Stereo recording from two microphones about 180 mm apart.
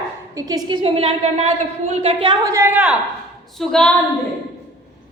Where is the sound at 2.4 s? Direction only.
15° right (ahead or behind); by 3.9 s 5° left (ahead or behind).